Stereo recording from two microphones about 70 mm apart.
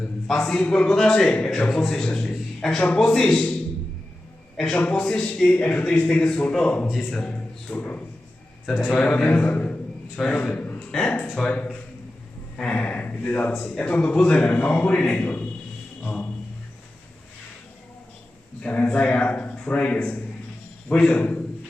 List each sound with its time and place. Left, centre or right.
0.3 s a man's voice: centre
0.6 s a man's voice: centre
0.9 s a man's voice: centre
4.7 s a man's voice: centre
13.5 s a man's voice: centre
18.6 s speech: left